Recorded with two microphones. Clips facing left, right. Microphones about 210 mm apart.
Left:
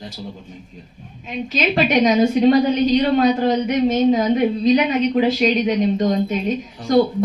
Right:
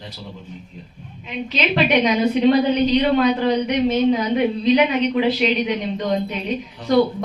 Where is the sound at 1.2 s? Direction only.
45° left (ahead or behind).